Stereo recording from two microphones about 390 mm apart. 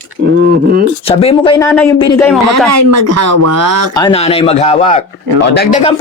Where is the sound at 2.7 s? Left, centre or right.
Right.